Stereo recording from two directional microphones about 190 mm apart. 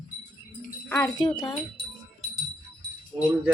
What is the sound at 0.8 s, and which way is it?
Wind chime, 15° left (ahead or behind).